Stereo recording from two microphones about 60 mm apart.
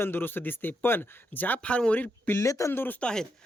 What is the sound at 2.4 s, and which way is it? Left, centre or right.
Speech, left.